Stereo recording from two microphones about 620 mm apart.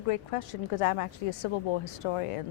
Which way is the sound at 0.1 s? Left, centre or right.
Left.